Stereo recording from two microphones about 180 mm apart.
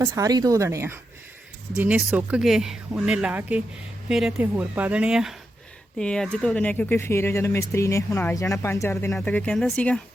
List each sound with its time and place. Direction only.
0.0 s speech: 15° right (ahead or behind); by 10.0 s 5° left (ahead or behind)